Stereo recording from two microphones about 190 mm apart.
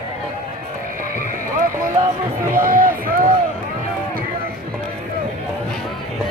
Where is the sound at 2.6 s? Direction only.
45° right (ahead or behind).